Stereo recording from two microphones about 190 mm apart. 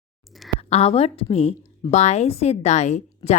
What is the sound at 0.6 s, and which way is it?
A woman's voice, 30° left (ahead or behind).